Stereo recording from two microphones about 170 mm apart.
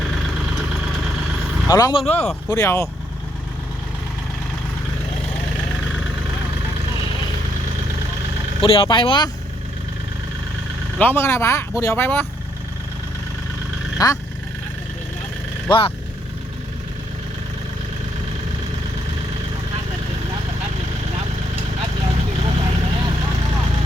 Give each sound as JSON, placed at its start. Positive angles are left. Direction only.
{"t": 1.6, "sound": "speech", "side_deg": 20}
{"t": 2.5, "sound": "speech", "side_deg": 15}
{"t": 8.6, "sound": "speech", "side_deg": 30}
{"t": 10.9, "sound": "speech", "side_deg": 10}
{"t": 14.0, "sound": "speech", "side_deg": 20}
{"t": 21.2, "sound": "vehicle", "side_deg": -35}